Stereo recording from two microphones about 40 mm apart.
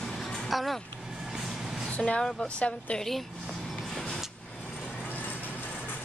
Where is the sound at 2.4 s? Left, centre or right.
Left.